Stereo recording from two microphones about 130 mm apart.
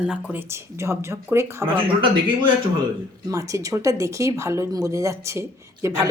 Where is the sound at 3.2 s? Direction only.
25° right (ahead or behind).